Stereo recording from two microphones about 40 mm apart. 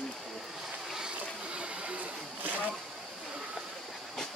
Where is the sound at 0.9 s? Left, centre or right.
Right.